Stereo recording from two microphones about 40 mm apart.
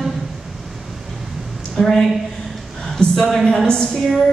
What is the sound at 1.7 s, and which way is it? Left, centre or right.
Speech, centre.